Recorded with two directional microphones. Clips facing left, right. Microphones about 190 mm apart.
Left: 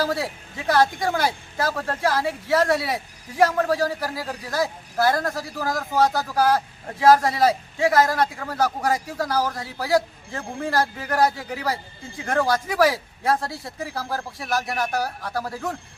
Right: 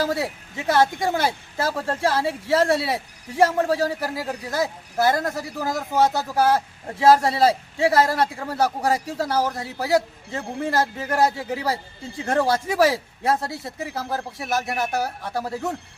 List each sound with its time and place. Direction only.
0.0 s a man's voice: 25° right (ahead or behind)